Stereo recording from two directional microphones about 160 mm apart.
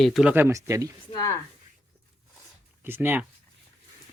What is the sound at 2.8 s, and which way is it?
Speech, 15° right (ahead or behind).